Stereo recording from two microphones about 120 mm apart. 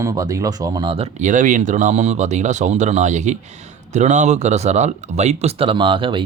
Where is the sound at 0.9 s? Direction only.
55° right (ahead or behind).